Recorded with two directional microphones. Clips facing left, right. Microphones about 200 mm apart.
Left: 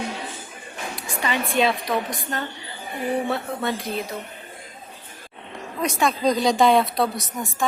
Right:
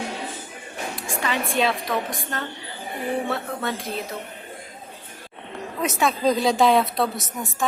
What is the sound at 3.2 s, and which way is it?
Speech, centre (ahead or behind).